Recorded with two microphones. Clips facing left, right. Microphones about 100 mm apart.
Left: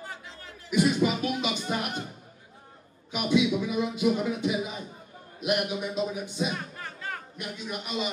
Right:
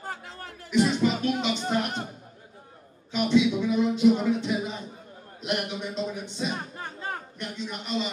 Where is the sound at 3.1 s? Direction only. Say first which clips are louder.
Right 2 dB; 10° left (ahead or behind).